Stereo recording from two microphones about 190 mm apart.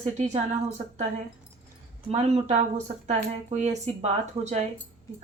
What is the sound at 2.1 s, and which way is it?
Speech, 35° right (ahead or behind).